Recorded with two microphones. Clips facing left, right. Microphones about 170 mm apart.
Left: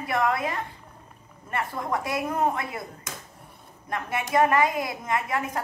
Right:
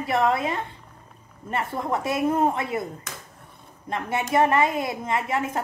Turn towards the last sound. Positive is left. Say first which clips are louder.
# right 2 dB
turn(degrees=-25)  # may be behind; listen again after turning